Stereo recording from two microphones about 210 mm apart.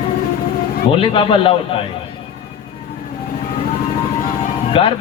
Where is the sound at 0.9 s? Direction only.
25° left (ahead or behind).